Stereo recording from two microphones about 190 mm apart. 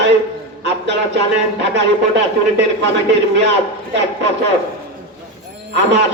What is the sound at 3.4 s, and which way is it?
Speech, 65° right (ahead or behind).